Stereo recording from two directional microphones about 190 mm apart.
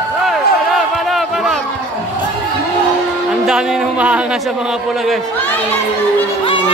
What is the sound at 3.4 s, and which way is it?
Speech, 5° right (ahead or behind).